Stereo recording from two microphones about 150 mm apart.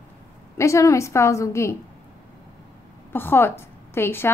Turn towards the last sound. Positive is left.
turn(degrees=15)  # may be behind; listen again after turning